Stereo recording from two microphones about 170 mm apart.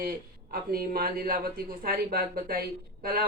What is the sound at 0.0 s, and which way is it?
Speech, 60° right (ahead or behind).